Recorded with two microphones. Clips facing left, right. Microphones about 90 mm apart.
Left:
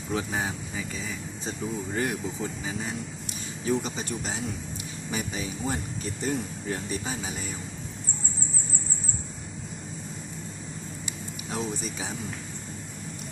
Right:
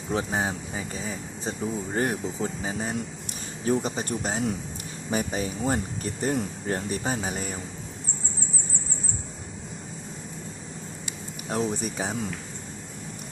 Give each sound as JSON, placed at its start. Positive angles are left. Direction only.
{"t": 0.1, "sound": "speech", "side_deg": -35}
{"t": 11.4, "sound": "speech", "side_deg": -50}